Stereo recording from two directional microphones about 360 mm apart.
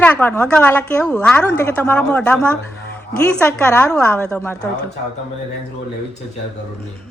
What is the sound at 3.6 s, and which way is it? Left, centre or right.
Speech, centre.